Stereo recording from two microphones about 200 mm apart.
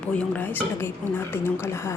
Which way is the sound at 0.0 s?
5° left (ahead or behind).